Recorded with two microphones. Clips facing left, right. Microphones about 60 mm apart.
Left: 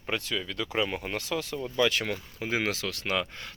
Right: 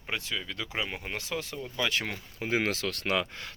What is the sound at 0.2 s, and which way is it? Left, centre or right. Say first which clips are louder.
Speech: left 3 dB; centre.